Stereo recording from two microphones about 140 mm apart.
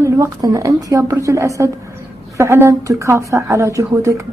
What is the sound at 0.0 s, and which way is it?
A woman's voice, 25° right (ahead or behind).